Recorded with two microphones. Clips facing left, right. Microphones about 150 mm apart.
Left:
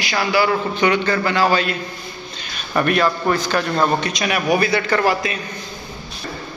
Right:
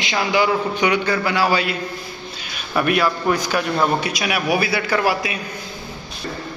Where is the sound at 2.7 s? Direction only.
10° right (ahead or behind).